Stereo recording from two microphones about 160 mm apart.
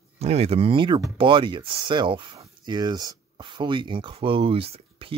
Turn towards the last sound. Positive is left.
turn(degrees=-35)  # may be behind; listen again after turning